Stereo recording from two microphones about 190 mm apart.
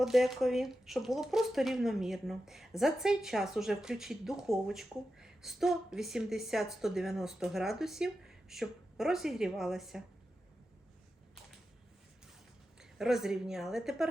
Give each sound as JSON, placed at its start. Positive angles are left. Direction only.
{"t": 0.0, "sound": "speech", "side_deg": 0}
{"t": 12.8, "sound": "speech", "side_deg": 0}